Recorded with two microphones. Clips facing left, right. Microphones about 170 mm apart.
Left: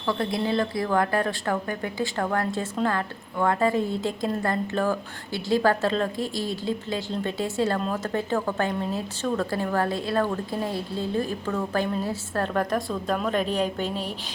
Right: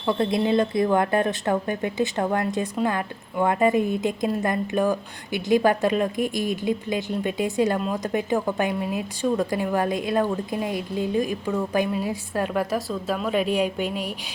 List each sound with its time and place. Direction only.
0.0 s a woman's voice: 20° right (ahead or behind)